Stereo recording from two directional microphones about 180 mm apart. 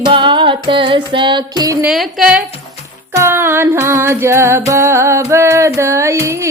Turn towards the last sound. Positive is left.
turn(degrees=-15)  # may be behind; listen again after turning